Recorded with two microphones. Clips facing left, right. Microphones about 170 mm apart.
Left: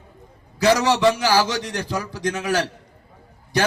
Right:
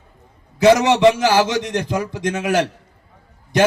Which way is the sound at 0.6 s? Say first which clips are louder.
Right 5 dB; 20° right (ahead or behind).